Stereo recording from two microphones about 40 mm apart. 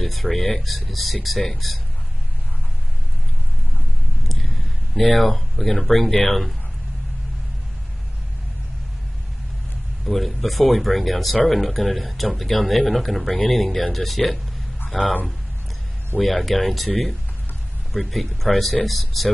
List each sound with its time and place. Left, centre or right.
0.0 s speech: centre
4.3 s speech: centre
10.0 s speech: centre
16.2 s speech: centre